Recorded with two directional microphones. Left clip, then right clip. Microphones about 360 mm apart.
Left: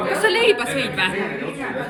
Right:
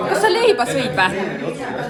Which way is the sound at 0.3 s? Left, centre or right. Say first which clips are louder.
Right 1 dB; centre.